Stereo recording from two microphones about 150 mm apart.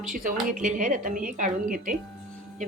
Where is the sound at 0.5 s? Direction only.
60° right (ahead or behind).